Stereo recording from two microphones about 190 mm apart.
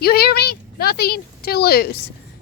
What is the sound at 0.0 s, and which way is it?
A woman's voice, 55° left (ahead or behind).